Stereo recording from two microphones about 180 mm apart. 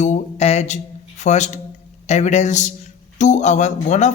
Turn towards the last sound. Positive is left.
turn(degrees=40)  # may be behind; listen again after turning